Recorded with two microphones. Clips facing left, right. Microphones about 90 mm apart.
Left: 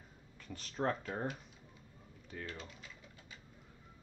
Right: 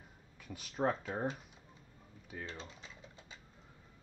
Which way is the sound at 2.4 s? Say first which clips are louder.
Even; 25° right (ahead or behind).